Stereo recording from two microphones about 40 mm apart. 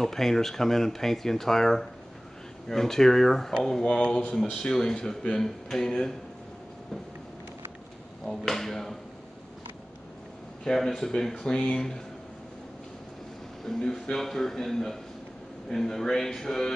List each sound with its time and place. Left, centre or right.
0.0 s speech: centre
3.8 s speech: left
8.3 s speech: centre
10.6 s speech: centre
13.7 s speech: centre